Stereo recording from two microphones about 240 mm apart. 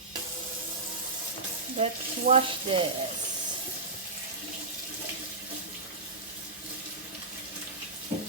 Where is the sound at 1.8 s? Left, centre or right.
Right.